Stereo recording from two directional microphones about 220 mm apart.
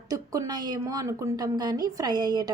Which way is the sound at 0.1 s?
15° right (ahead or behind).